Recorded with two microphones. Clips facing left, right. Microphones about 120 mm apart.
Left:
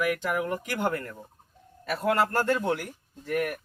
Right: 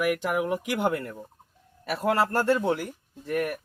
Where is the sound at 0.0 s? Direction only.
10° right (ahead or behind).